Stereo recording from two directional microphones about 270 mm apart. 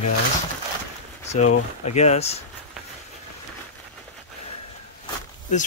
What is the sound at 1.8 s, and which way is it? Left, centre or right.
Speech, left.